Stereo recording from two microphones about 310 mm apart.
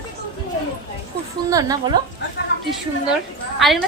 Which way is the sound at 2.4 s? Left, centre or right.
Left.